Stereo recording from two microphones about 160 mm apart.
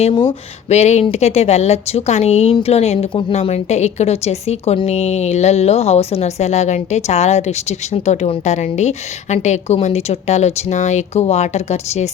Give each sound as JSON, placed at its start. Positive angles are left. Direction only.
{"t": 0.0, "sound": "a woman's voice", "side_deg": 30}